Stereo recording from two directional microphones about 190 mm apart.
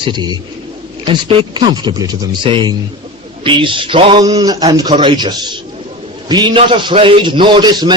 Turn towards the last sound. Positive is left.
turn(degrees=-25)  # may be behind; listen again after turning